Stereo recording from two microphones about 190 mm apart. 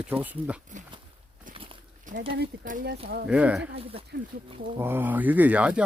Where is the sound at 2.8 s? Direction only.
55° right (ahead or behind).